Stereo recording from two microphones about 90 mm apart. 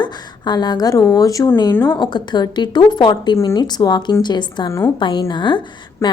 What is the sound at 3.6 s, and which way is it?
A woman's voice, 50° left (ahead or behind).